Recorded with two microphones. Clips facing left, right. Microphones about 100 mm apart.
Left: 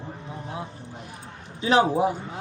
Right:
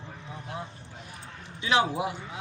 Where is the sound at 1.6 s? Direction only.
40° left (ahead or behind).